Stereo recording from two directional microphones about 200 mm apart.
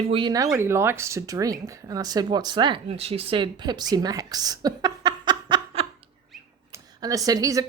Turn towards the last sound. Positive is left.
turn(degrees=-15)  # may be behind; listen again after turning